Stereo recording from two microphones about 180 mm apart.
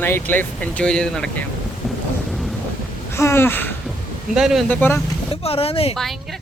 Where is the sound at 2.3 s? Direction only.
Centre (ahead or behind).